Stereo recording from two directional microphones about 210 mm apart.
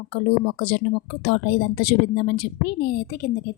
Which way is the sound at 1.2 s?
50° left (ahead or behind).